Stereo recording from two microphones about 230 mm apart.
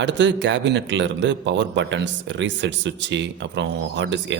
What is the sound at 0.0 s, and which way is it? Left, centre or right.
A man's voice, right.